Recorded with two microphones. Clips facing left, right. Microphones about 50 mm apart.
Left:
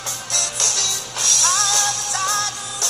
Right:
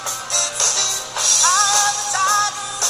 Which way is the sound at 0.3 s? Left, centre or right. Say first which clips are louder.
Right 1 dB; right.